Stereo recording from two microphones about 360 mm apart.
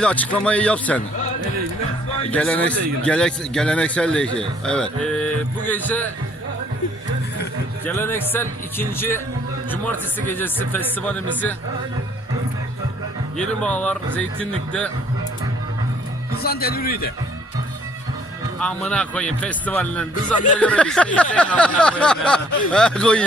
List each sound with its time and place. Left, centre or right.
0.0 s a man's voice: centre
2.3 s a man's voice: centre
7.9 s a man's voice: centre
9.0 s music: centre
9.7 s a man's voice: centre
13.3 s a man's voice: centre
16.4 s a man's voice: left
18.6 s a man's voice: centre